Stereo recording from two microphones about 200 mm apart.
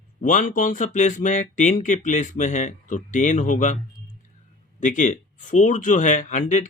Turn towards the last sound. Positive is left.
turn(degrees=40)  # may be behind; listen again after turning